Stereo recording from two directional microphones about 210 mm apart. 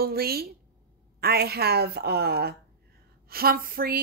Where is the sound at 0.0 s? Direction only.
45° right (ahead or behind).